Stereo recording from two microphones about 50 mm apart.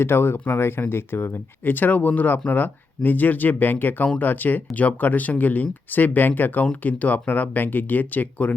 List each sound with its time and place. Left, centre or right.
0.0 s speech: left